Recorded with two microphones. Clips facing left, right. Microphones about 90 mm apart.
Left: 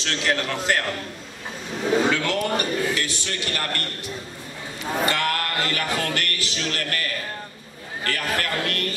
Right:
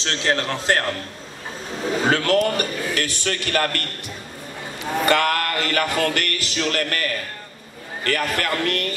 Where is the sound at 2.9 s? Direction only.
55° right (ahead or behind).